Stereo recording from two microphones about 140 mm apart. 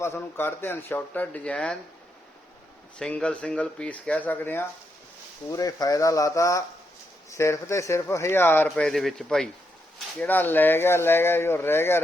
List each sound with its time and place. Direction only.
0.0 s speech: 15° left (ahead or behind)
3.0 s speech: 5° left (ahead or behind)
5.5 s speech: 25° left (ahead or behind)
8.8 s a man's voice: centre (ahead or behind)
10.2 s speech: 15° left (ahead or behind)